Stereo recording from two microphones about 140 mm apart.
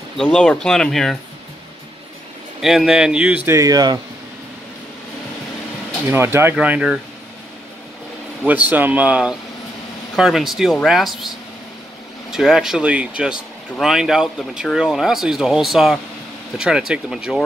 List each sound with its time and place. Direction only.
0.2 s speech: 5° left (ahead or behind)
2.6 s speech: 5° right (ahead or behind)
3.4 s speech: 25° right (ahead or behind)
6.0 s speech: 15° right (ahead or behind)
8.5 s speech: 10° right (ahead or behind)